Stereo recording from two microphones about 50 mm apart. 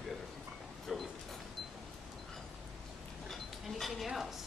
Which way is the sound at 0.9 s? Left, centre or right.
Centre.